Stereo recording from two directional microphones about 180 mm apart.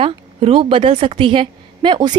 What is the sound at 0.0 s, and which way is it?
A woman's voice, 30° right (ahead or behind).